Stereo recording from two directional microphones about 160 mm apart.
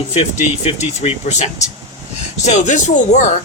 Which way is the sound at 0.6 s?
40° left (ahead or behind).